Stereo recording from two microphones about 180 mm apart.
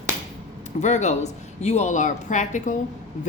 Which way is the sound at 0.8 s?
40° left (ahead or behind).